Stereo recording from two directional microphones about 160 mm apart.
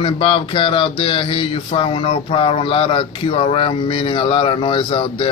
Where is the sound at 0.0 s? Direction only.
30° left (ahead or behind).